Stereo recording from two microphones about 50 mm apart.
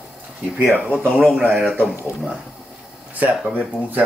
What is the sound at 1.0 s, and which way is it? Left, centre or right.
Speech, centre.